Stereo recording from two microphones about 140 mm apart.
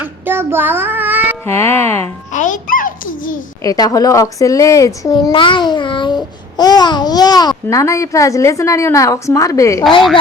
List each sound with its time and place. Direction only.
0.0 s child singing: 15° right (ahead or behind)
1.5 s speech: 20° left (ahead or behind)
2.3 s a child's voice: 65° left (ahead or behind)
3.6 s speech: 25° left (ahead or behind)
5.3 s babbling: 35° left (ahead or behind)
6.6 s speech: 30° left (ahead or behind)